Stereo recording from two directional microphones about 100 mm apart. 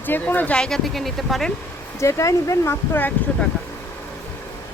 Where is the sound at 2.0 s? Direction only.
30° left (ahead or behind).